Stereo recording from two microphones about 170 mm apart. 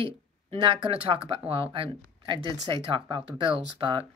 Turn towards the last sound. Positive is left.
turn(degrees=-30)  # may be behind; listen again after turning